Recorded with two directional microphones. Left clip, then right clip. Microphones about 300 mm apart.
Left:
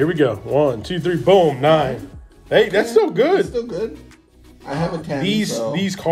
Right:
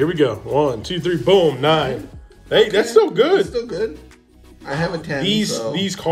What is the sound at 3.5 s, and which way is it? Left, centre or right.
A man's voice, right.